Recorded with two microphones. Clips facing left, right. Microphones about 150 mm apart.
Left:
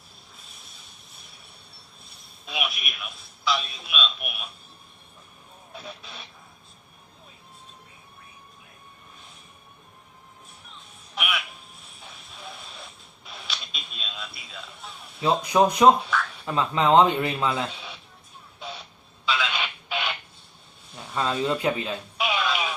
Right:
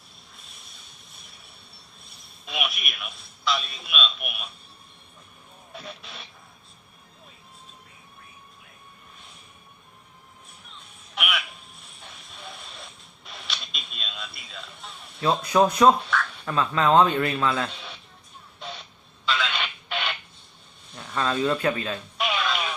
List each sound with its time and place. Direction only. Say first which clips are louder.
2.0 s a man's voice: even; centre (ahead or behind)
5.7 s speech: even; centre (ahead or behind)
11.8 s a sound: even; centre (ahead or behind)
15.2 s speech: even; 15° left (ahead or behind)
16.0 s a sound: even; 5° left (ahead or behind)
16.5 s speech: left 1 dB; 20° left (ahead or behind)
19.2 s telephone: even; 5° left (ahead or behind)
20.9 s speech: right 1 dB; 10° left (ahead or behind)
22.2 s radio: left 1 dB; 5° left (ahead or behind)